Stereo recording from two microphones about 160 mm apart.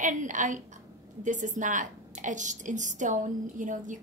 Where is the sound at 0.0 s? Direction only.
50° right (ahead or behind).